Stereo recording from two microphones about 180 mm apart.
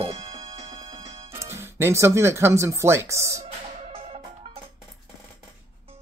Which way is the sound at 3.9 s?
30° right (ahead or behind).